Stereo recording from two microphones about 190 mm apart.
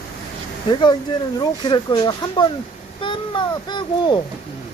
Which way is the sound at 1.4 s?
20° left (ahead or behind).